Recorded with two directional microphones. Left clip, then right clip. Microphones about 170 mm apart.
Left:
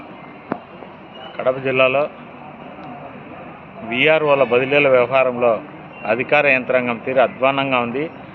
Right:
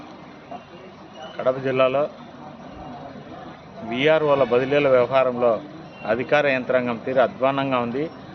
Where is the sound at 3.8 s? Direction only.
15° right (ahead or behind).